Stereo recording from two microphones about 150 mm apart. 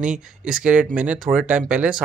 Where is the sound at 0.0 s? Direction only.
5° right (ahead or behind).